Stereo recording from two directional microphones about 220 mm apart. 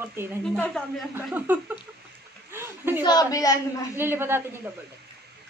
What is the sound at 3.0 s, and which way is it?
Speech, 20° left (ahead or behind).